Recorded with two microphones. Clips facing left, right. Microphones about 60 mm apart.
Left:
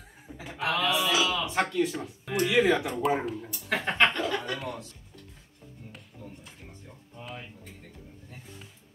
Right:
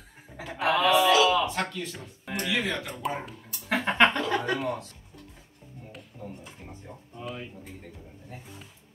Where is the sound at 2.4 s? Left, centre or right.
Centre.